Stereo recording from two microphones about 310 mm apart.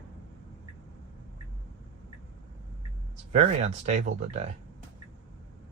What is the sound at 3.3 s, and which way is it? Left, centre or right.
Speech, right.